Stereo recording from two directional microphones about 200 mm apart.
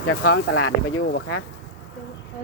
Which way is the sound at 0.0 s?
85° left.